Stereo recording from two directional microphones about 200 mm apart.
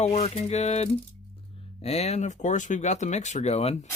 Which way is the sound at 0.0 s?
35° left (ahead or behind).